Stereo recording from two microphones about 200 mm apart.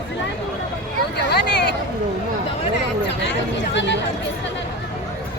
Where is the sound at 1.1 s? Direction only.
55° left (ahead or behind).